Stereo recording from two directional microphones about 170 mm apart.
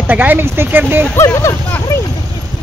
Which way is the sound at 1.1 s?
15° left (ahead or behind).